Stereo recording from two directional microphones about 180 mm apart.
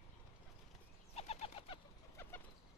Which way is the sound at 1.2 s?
35° left (ahead or behind).